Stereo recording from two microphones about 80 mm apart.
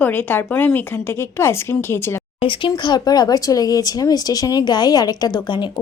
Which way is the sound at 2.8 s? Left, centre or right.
Left.